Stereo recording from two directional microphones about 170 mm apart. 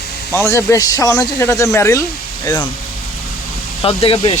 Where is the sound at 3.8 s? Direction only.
35° left (ahead or behind).